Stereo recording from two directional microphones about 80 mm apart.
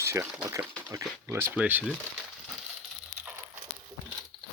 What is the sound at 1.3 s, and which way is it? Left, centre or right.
Speech, right.